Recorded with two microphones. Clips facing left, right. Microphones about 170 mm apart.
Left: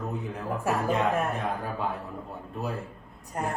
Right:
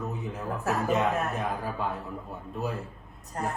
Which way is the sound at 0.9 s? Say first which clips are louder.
Even; centre (ahead or behind).